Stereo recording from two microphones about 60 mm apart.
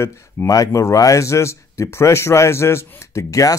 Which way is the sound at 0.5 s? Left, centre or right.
Left.